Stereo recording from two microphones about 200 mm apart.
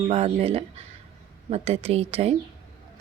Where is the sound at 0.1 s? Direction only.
30° right (ahead or behind).